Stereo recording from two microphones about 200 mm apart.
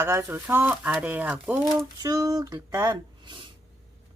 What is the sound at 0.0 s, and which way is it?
Speech, 15° right (ahead or behind).